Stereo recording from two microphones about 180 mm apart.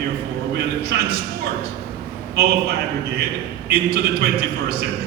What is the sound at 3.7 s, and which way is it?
A man's voice, 60° right (ahead or behind).